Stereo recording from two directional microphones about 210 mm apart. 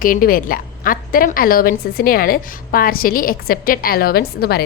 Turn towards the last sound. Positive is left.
turn(degrees=45)  # may be behind; listen again after turning